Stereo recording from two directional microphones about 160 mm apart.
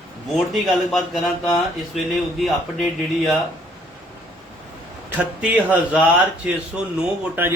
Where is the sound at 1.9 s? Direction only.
Centre (ahead or behind).